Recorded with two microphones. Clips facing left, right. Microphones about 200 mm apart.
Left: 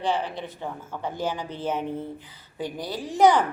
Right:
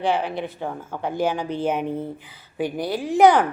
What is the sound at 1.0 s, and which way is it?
A woman's voice, 10° right (ahead or behind).